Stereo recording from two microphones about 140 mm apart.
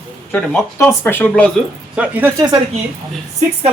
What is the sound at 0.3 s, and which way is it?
Speech, 10° left (ahead or behind).